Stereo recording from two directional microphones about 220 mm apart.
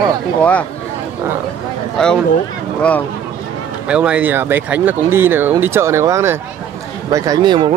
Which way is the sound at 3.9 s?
5° right (ahead or behind).